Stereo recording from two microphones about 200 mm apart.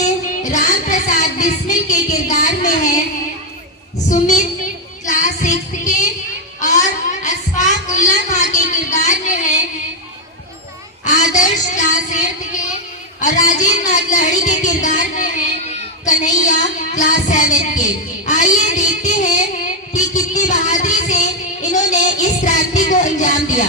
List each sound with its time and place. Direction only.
0.5 s speech: 35° left (ahead or behind)
4.1 s speech: 40° left (ahead or behind)
5.0 s child singing: 40° left (ahead or behind)
6.6 s a sound: 35° left (ahead or behind)
11.0 s speech: 40° left (ahead or behind)
15.7 s cat: 35° left (ahead or behind)
19.9 s child singing: 35° left (ahead or behind)